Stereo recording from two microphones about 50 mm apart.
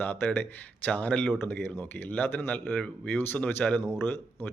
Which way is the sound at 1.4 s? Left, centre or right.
Left.